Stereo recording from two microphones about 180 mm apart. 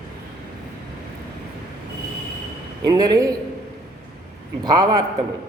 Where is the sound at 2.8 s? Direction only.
20° right (ahead or behind).